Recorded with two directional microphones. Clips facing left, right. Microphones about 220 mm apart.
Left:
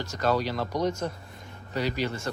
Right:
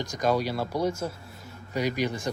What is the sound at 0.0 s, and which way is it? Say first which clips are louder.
Speech: right 1 dB; 15° right (ahead or behind).